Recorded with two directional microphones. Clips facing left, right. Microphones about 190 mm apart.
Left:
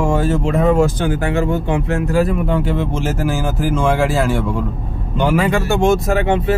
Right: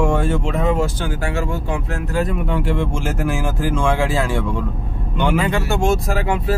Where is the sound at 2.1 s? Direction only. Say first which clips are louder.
Left 3 dB; 5° left (ahead or behind).